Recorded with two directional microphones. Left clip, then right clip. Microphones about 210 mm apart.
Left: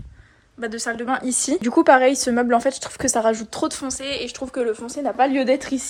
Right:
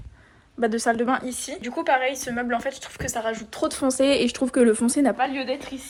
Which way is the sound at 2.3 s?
30° left (ahead or behind).